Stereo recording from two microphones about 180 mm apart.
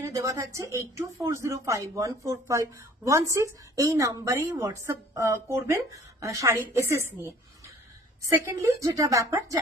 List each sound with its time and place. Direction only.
0.0 s speech: 15° right (ahead or behind)